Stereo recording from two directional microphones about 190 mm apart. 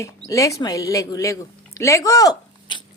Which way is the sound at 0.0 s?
15° left (ahead or behind).